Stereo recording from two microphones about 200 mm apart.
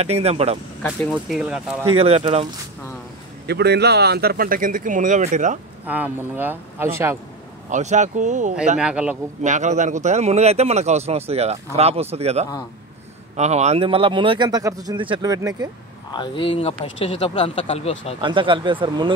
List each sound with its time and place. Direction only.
0.0 s speech: 30° right (ahead or behind)
0.8 s speech: 5° left (ahead or behind)
1.9 s speech: 30° right (ahead or behind)
3.4 s speech: 55° right (ahead or behind); by 5.6 s 40° right (ahead or behind)
5.9 s a man's voice: 10° right (ahead or behind)
7.7 s speech: 35° right (ahead or behind)
8.7 s speech: 5° right (ahead or behind)
9.4 s speech: 35° right (ahead or behind); by 15.7 s 20° right (ahead or behind)
16.1 s speech: 25° left (ahead or behind)
18.2 s speech: 25° right (ahead or behind)